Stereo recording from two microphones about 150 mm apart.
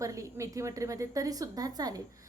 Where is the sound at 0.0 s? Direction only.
20° right (ahead or behind).